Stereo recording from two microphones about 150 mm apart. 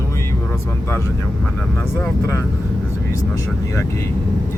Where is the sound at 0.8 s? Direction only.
15° left (ahead or behind).